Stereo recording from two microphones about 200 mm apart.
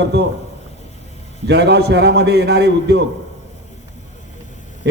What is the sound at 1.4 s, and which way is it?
A man's voice, 55° right (ahead or behind).